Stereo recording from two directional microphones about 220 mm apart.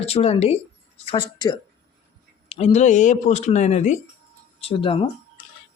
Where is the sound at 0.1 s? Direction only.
30° left (ahead or behind).